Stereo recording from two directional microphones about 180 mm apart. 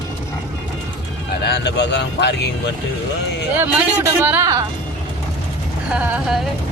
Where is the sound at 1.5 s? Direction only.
70° left (ahead or behind).